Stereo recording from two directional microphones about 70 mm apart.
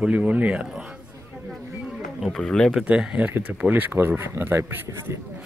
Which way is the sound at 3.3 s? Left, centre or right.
Right.